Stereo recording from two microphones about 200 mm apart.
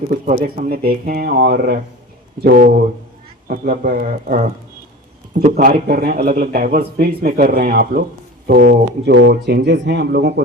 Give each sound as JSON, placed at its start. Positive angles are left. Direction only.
{"t": 0.3, "sound": "a man's voice", "side_deg": -50}